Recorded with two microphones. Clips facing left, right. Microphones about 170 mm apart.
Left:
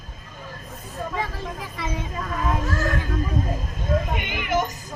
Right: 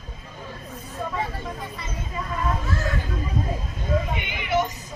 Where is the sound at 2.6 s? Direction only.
45° left (ahead or behind).